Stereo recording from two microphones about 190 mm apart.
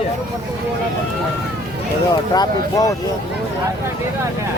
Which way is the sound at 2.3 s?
20° left (ahead or behind).